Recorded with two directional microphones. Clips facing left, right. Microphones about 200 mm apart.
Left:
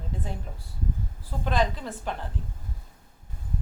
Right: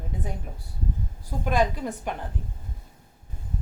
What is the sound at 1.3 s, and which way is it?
Speech, 10° right (ahead or behind).